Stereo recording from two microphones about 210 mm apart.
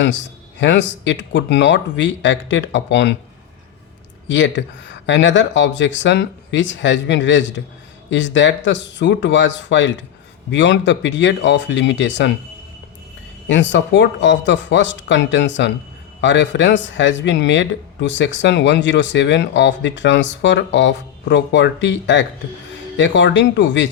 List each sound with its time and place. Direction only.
0.6 s speech: 60° left (ahead or behind)
4.3 s speech: 60° left (ahead or behind)
13.5 s speech: 60° left (ahead or behind)